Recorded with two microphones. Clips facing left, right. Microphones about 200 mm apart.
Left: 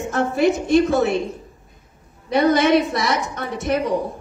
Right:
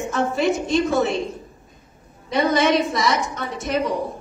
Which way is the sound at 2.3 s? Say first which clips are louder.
Left 3 dB; 60° left (ahead or behind).